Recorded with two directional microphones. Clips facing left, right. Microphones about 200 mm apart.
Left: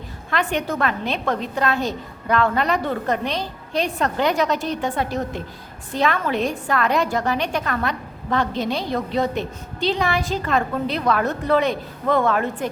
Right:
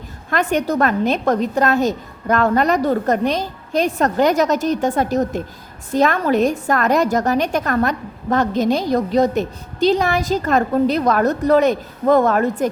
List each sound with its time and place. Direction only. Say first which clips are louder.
0.3 s a woman's voice: right 5 dB; 45° right (ahead or behind)